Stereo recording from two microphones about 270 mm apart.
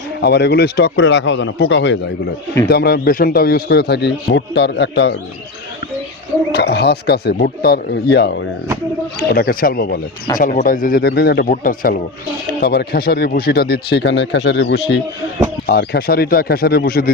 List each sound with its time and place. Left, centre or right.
0.2 s speech: left
6.5 s speech: left